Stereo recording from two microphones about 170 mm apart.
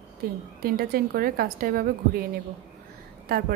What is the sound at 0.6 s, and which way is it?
A woman's voice, 60° right (ahead or behind).